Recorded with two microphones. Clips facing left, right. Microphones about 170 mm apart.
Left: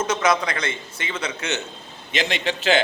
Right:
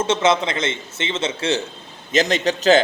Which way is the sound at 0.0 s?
25° right (ahead or behind).